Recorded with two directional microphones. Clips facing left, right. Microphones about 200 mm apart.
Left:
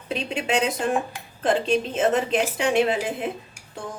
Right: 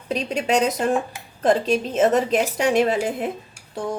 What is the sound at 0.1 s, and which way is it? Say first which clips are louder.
A woman's voice: right 4 dB; 40° right (ahead or behind).